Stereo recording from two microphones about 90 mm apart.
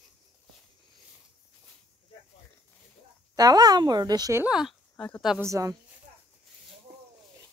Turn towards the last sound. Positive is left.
turn(degrees=-40)  # may be behind; listen again after turning